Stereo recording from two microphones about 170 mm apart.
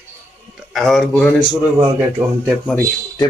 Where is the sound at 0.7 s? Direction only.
Centre (ahead or behind).